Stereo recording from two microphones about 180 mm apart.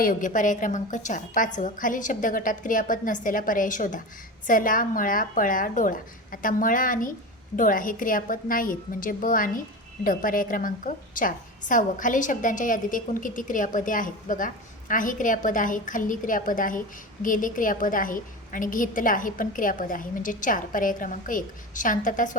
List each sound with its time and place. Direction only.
0.0 s a woman's voice: 50° left (ahead or behind)